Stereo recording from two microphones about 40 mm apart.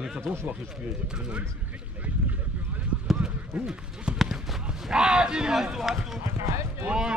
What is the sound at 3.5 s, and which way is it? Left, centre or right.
Speech, right.